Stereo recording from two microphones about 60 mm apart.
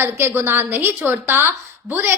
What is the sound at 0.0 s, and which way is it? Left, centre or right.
A woman's voice, right.